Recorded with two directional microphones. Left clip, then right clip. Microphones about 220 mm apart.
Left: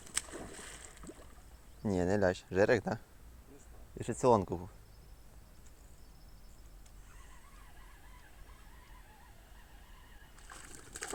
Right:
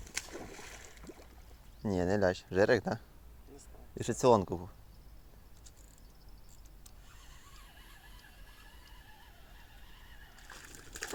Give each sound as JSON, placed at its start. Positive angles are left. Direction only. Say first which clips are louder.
{"t": 0.0, "sound": "boat", "louder": "even", "side_deg": 30}
{"t": 1.8, "sound": "speech", "louder": "right 1 dB", "side_deg": 0}
{"t": 3.9, "sound": "speech", "louder": "right 2 dB", "side_deg": -15}
{"t": 10.3, "sound": "boat", "louder": "right 1 dB", "side_deg": 5}